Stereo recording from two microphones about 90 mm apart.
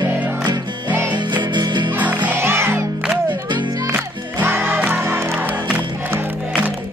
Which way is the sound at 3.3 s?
60° right (ahead or behind).